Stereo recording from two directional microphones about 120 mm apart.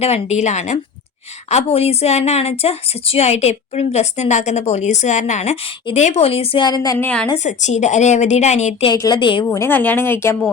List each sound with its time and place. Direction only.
0.0 s speech: 65° left (ahead or behind)
1.5 s a woman's voice: 65° left (ahead or behind)
6.7 s a woman's voice: 30° left (ahead or behind)
7.0 s speech: 10° left (ahead or behind)
7.3 s speech: 75° left (ahead or behind)
9.0 s a woman's voice: 35° left (ahead or behind)
9.5 s speech: 20° left (ahead or behind)